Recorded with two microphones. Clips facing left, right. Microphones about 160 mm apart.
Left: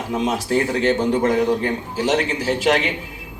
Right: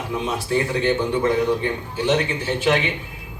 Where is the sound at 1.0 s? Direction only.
40° left (ahead or behind).